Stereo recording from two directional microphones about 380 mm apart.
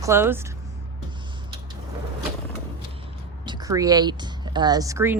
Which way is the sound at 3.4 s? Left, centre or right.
Centre.